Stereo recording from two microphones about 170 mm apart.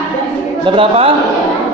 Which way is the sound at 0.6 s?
30° right (ahead or behind).